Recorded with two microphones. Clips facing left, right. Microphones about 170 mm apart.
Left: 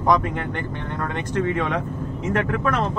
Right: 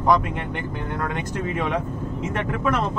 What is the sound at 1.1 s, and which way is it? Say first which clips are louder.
Speech: left 3 dB; 10° right (ahead or behind).